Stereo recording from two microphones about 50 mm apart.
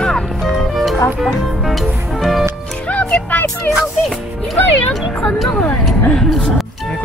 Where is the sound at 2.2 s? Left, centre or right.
Centre.